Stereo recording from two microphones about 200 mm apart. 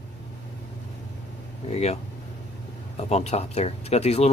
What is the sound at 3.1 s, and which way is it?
Speech, 30° left (ahead or behind).